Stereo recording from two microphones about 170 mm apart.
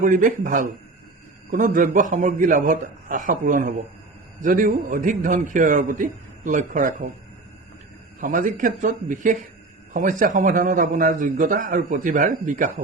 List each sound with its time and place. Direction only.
0.0 s a man's voice: 50° right (ahead or behind)
8.2 s a man's voice: 55° right (ahead or behind)